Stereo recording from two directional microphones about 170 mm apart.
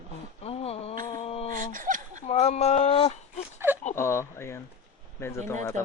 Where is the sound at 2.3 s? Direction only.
40° left (ahead or behind).